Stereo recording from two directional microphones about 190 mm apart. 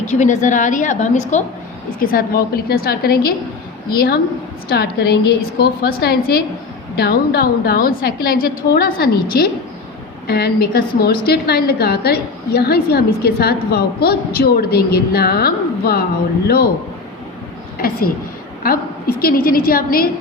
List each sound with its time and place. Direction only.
0.0 s a woman's voice: 40° left (ahead or behind)
2.0 s a woman's voice: 50° left (ahead or behind)
17.7 s a woman's voice: 50° left (ahead or behind)